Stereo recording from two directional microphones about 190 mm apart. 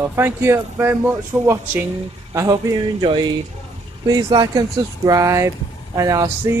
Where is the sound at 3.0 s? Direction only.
25° right (ahead or behind).